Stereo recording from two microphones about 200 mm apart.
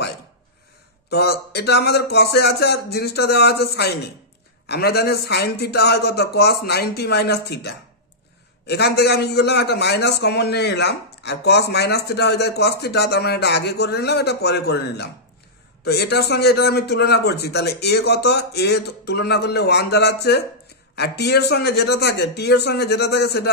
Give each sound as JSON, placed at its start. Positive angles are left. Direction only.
{"t": 1.1, "sound": "a man's voice", "side_deg": 55}